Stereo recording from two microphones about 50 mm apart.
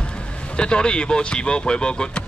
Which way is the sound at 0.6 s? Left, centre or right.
Centre.